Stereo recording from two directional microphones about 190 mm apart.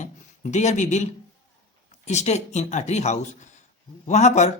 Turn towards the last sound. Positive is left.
turn(degrees=35)  # may be behind; listen again after turning